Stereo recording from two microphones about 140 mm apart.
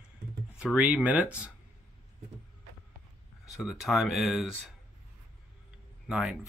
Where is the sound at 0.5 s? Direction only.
10° right (ahead or behind).